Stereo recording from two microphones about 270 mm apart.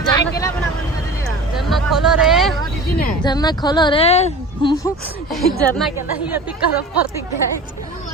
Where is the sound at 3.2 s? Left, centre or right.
Centre.